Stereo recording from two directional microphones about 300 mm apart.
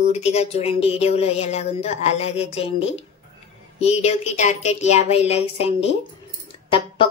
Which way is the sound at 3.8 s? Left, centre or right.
Left.